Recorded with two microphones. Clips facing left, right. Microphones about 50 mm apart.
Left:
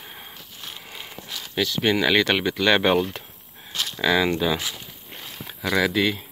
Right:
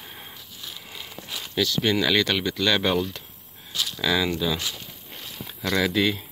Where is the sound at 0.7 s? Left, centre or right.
Left.